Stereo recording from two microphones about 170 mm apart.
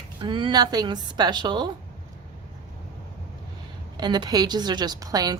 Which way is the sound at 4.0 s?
25° right (ahead or behind).